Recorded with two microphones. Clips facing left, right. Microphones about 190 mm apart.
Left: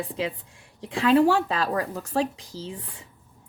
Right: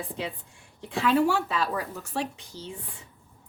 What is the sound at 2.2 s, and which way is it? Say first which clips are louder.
Speech: left 6 dB; 90° left.